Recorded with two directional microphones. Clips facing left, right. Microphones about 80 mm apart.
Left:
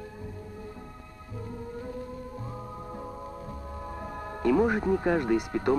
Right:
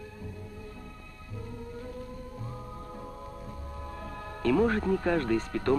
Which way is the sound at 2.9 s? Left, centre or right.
Centre.